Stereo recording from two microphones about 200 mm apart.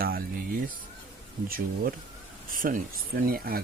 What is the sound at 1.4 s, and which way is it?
Speech, 45° right (ahead or behind).